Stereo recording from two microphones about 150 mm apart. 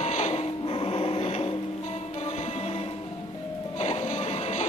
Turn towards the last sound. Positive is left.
turn(degrees=50)  # may be behind; listen again after turning